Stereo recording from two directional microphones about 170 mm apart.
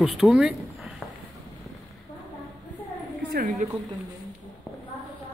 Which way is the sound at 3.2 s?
60° right (ahead or behind).